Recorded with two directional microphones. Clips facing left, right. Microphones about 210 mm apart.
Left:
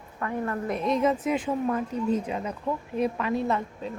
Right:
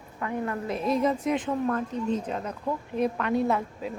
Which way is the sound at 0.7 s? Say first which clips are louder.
Left 1 dB; centre (ahead or behind).